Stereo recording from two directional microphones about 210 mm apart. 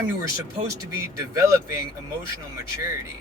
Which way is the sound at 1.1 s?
15° right (ahead or behind).